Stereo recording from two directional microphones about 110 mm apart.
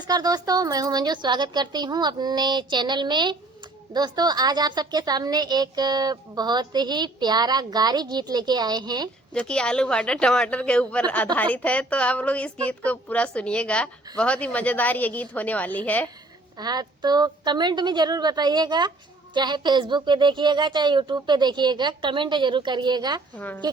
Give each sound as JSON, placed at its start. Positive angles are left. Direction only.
{"t": 0.1, "sound": "a woman's voice", "side_deg": -35}
{"t": 9.3, "sound": "a woman's voice", "side_deg": 10}
{"t": 16.6, "sound": "a woman's voice", "side_deg": -40}